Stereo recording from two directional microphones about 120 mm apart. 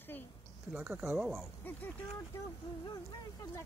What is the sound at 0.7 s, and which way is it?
Speech, 15° right (ahead or behind).